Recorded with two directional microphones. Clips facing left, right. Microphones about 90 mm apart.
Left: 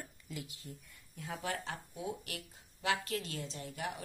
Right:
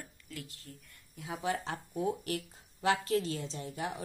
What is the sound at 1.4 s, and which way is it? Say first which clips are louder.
Speech: right 6 dB; 30° right (ahead or behind).